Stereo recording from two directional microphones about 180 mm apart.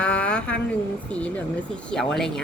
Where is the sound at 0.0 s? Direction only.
5° left (ahead or behind).